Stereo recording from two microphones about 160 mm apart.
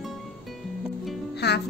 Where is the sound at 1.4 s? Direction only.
90° left.